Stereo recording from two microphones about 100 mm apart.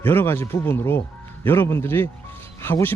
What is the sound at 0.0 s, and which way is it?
Speech, 20° left (ahead or behind).